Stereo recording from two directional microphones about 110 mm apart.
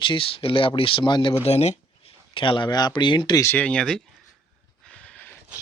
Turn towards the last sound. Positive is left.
turn(degrees=10)  # may be behind; listen again after turning